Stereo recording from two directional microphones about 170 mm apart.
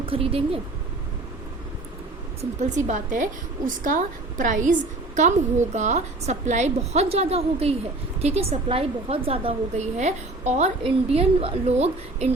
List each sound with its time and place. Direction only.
0.0 s speech: 30° right (ahead or behind)
2.4 s a woman's voice: 45° right (ahead or behind)